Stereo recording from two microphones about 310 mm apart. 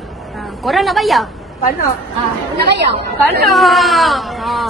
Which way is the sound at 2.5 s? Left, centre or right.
Right.